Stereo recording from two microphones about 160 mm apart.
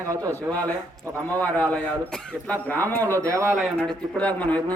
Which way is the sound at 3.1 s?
20° right (ahead or behind).